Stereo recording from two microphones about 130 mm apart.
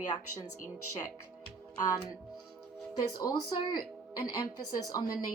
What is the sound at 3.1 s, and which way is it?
Speech, 35° left (ahead or behind).